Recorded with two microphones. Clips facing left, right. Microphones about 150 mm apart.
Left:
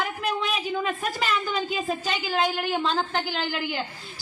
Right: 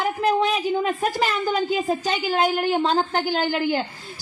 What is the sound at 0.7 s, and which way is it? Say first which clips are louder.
A woman's voice: right 5 dB; 35° right (ahead or behind).